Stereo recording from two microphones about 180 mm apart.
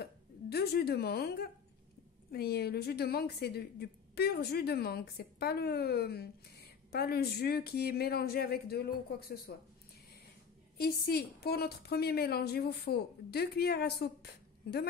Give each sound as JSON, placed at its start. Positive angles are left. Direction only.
{"t": 0.0, "sound": "a woman's voice", "side_deg": 60}
{"t": 10.8, "sound": "a woman's voice", "side_deg": 60}